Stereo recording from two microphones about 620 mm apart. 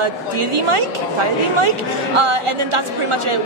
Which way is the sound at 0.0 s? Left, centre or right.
Right.